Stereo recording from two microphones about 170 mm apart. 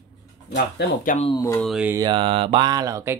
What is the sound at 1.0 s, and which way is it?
Speech, 40° left (ahead or behind).